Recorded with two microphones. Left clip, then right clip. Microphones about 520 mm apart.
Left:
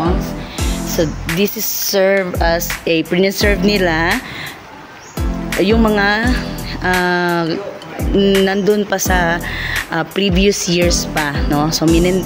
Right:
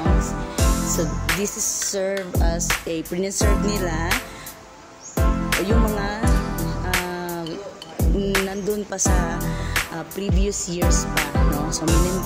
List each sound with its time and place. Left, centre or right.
0.6 s music: centre
0.9 s music: right
5.7 s music: right
11.8 s speech: centre